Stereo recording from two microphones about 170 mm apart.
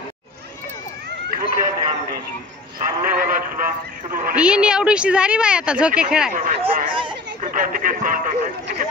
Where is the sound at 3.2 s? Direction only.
55° right (ahead or behind).